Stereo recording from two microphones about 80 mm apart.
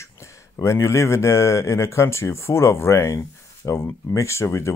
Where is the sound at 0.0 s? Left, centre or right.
Left.